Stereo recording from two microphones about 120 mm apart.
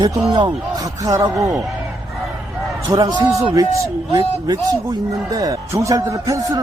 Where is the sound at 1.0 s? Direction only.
25° right (ahead or behind).